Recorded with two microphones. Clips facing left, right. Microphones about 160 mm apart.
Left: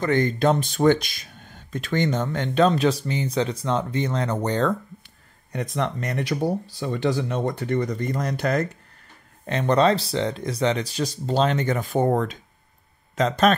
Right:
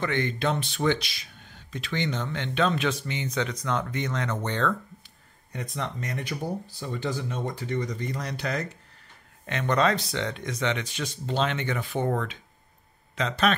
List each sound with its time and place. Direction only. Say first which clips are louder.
0.0 s speech: left 7 dB; 40° left (ahead or behind)
5.5 s speech: left 7 dB; 70° left (ahead or behind); by 8.6 s 50° left (ahead or behind)
9.5 s a man's voice: left 5 dB; 35° left (ahead or behind)